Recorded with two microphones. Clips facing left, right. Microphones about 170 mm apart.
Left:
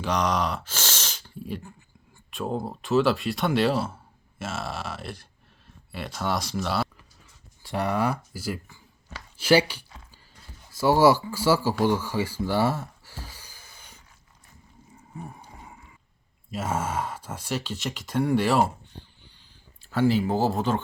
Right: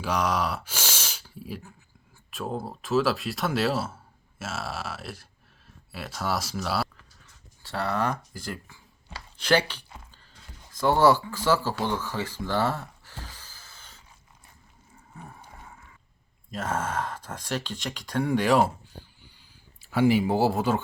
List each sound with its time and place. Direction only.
0.0 s speech: 5° right (ahead or behind)
7.6 s speech: 15° left (ahead or behind)
16.5 s speech: 10° left (ahead or behind)
19.8 s speech: 10° right (ahead or behind)